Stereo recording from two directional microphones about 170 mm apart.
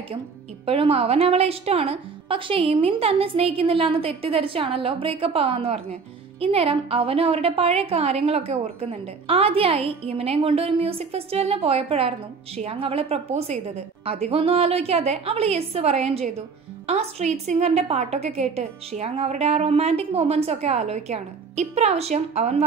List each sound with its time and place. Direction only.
0.7 s a woman's voice: 35° right (ahead or behind)